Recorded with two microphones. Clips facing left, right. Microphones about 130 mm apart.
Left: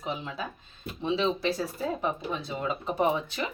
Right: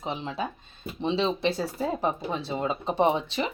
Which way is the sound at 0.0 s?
25° right (ahead or behind).